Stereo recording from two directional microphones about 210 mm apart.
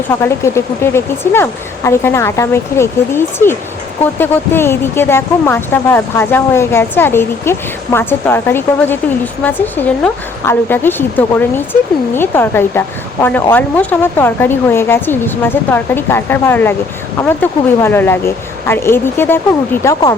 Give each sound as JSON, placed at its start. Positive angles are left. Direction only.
{"t": 0.2, "sound": "speech", "side_deg": 10}